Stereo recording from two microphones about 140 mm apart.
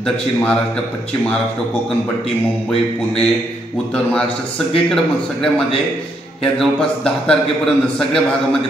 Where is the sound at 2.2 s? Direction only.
40° left (ahead or behind).